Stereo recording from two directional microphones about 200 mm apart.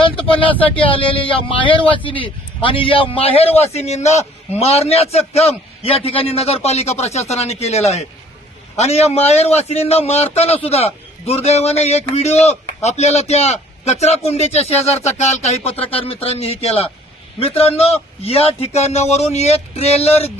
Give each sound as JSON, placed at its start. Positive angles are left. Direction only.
{"t": 0.0, "sound": "speech", "side_deg": 25}